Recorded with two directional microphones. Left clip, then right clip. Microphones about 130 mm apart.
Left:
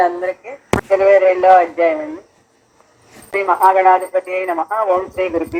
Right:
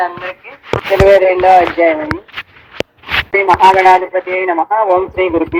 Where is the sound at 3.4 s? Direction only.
75° right (ahead or behind).